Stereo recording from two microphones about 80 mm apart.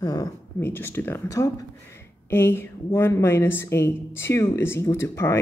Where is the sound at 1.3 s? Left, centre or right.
Left.